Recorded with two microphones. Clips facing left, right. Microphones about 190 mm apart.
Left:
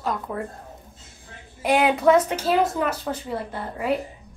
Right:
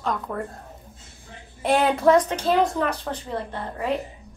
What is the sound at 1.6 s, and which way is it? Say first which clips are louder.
A woman's voice: even; centre (ahead or behind).